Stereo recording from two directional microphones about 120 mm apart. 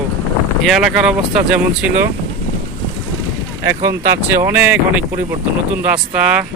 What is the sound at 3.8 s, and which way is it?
Speech, 25° right (ahead or behind).